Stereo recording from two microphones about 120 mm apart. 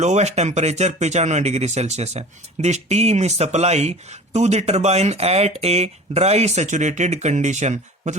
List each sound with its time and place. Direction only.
0.0 s speech: 70° right (ahead or behind)